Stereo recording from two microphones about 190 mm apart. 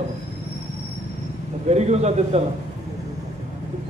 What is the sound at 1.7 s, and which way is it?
Speech, 35° right (ahead or behind).